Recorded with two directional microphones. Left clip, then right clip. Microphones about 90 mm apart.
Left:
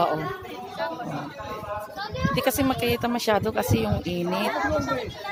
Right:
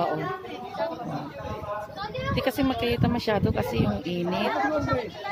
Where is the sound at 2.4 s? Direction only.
20° left (ahead or behind).